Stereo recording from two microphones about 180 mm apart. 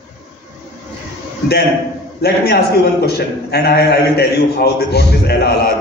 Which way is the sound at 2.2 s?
60° left (ahead or behind).